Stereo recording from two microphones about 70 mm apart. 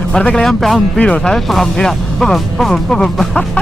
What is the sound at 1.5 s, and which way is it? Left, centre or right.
Speech, centre.